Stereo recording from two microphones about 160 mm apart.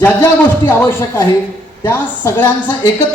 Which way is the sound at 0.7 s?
15° left (ahead or behind).